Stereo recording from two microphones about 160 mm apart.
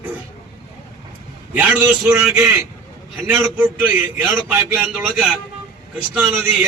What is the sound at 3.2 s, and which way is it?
Speech, 10° right (ahead or behind).